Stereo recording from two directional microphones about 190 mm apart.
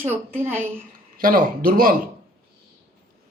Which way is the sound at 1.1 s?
50° right (ahead or behind).